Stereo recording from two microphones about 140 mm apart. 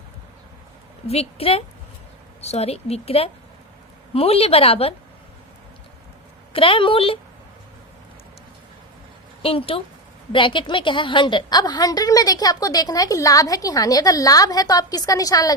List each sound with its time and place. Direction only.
1.0 s speech: 45° left (ahead or behind)
6.5 s a woman's voice: 40° left (ahead or behind)
9.4 s a woman's voice: 40° left (ahead or behind); by 15.5 s 25° left (ahead or behind)